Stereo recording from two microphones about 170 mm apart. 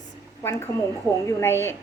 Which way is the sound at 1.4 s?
15° left (ahead or behind).